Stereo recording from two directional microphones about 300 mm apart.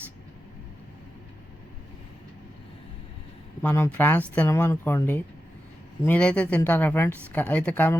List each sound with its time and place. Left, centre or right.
3.6 s speech: centre